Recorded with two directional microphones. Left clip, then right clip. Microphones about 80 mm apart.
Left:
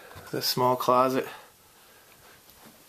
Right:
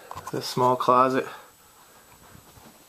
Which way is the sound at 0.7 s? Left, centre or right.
Left.